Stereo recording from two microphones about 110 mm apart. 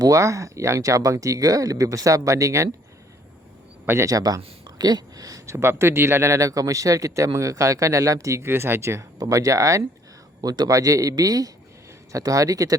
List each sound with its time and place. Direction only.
0.0 s speech: 30° right (ahead or behind)
3.8 s a man's voice: 25° right (ahead or behind)